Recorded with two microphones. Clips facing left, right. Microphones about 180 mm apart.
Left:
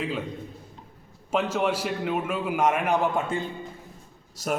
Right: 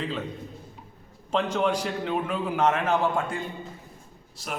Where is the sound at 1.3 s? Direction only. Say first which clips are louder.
Even; 10° left (ahead or behind).